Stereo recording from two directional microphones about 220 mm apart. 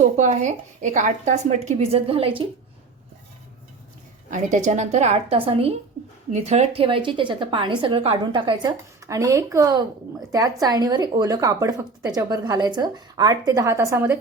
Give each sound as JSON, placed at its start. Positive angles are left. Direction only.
{"t": 0.0, "sound": "a woman's voice", "side_deg": -35}
{"t": 4.3, "sound": "a woman's voice", "side_deg": -35}